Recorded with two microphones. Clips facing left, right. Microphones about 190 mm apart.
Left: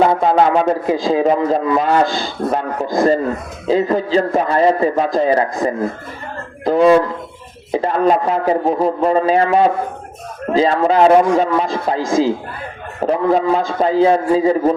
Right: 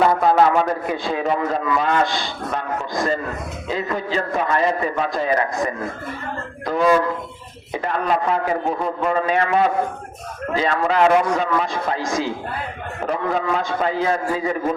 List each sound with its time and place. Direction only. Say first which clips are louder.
0.0 s a man's voice: left 3 dB; 25° left (ahead or behind)
13.1 s a man's voice: left 7 dB; 30° left (ahead or behind)